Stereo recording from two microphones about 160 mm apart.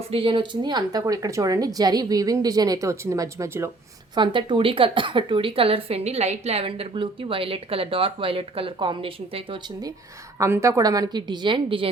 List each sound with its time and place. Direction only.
0.1 s speech: 35° right (ahead or behind); by 3.7 s 20° right (ahead or behind)
4.1 s a woman's voice: 30° right (ahead or behind)
10.3 s speech: 20° right (ahead or behind)